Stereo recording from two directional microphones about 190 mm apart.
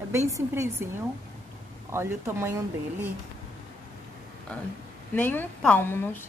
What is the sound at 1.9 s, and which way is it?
Speech, 15° right (ahead or behind).